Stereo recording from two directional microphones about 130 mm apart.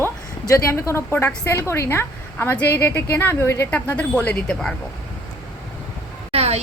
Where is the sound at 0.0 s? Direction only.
20° left (ahead or behind).